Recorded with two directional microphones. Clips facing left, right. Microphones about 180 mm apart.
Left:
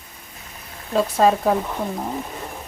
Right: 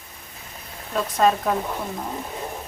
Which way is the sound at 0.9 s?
30° left (ahead or behind).